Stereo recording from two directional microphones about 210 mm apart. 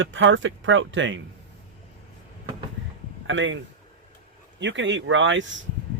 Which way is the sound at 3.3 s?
60° right (ahead or behind).